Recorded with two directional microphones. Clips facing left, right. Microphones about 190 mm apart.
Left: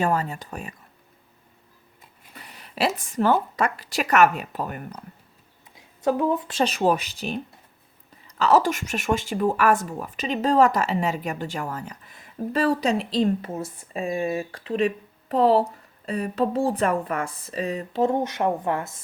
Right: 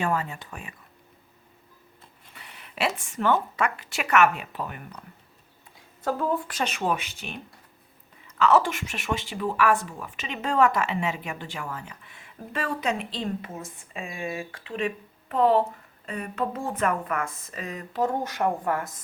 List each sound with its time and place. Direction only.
0.0 s speech: 40° left (ahead or behind)
2.3 s speech: 40° left (ahead or behind)
6.0 s a woman's voice: 20° left (ahead or behind)
6.6 s speech: 35° left (ahead or behind)
8.4 s speech: 35° left (ahead or behind)